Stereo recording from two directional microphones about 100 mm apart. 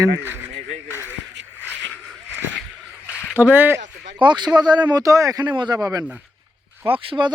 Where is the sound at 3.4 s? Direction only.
20° right (ahead or behind).